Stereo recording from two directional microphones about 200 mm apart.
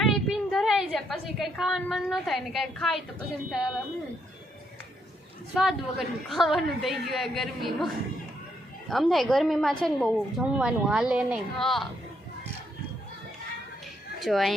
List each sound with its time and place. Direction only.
0.0 s a sound: centre (ahead or behind)
2.0 s a woman's voice: centre (ahead or behind)
5.5 s a woman's voice: centre (ahead or behind)
8.9 s a woman's voice: centre (ahead or behind)
14.2 s a woman's voice: centre (ahead or behind)